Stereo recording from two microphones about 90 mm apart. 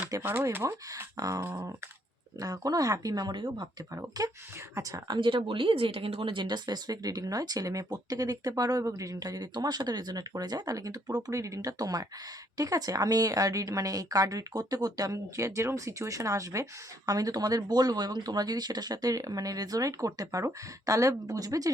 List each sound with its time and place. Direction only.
0.2 s speech: 25° right (ahead or behind)
2.4 s a woman's voice: 40° right (ahead or behind)